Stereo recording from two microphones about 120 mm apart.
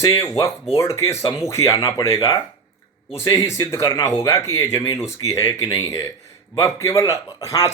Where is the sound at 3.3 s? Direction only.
25° left (ahead or behind).